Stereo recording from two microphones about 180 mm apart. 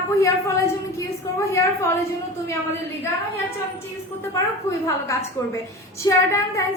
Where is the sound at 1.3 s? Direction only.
15° left (ahead or behind).